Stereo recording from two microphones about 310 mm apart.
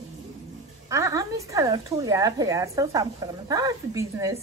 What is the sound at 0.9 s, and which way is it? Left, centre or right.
A woman's voice, centre.